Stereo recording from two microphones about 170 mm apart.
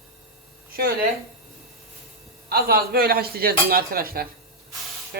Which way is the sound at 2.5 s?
65° right (ahead or behind).